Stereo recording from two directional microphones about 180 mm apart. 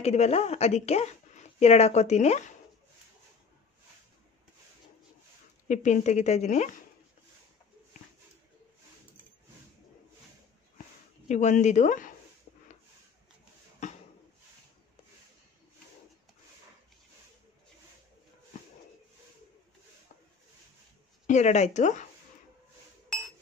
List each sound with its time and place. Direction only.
0.0 s a woman's voice: 35° left (ahead or behind)
5.7 s a woman's voice: 40° left (ahead or behind)
11.2 s speech: 40° left (ahead or behind)
21.3 s a woman's voice: 40° left (ahead or behind)